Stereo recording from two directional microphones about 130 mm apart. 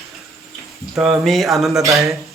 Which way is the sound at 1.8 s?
25° right (ahead or behind).